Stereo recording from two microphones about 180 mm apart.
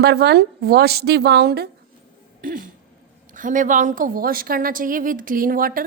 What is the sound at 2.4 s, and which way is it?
Throat clearing, 50° right (ahead or behind).